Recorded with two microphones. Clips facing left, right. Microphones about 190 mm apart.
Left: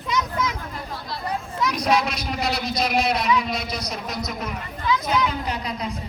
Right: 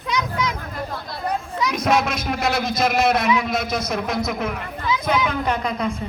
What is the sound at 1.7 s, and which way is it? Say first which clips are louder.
A man's voice: right 3 dB; 50° right (ahead or behind).